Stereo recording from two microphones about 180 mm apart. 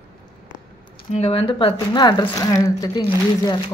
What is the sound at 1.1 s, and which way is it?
Speech, 35° left (ahead or behind).